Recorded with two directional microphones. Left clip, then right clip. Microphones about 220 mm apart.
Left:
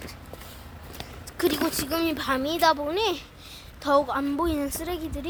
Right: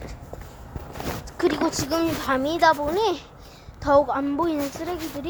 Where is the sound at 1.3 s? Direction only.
Centre (ahead or behind).